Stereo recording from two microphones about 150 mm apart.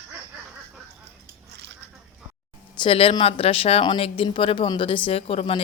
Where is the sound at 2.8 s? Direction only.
35° left (ahead or behind).